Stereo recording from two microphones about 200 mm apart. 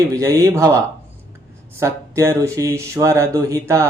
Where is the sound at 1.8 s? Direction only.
15° right (ahead or behind).